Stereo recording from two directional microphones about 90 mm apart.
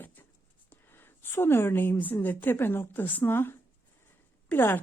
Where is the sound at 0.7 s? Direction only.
25° left (ahead or behind).